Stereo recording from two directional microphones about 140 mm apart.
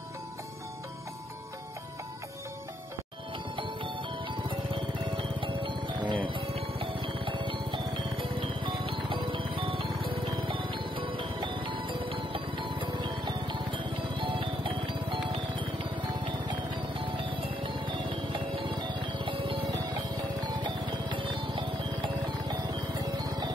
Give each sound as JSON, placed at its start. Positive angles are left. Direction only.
{"t": 3.5, "sound": "music", "side_deg": -35}